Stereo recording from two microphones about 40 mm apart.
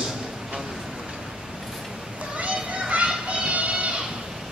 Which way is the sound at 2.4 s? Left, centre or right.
Right.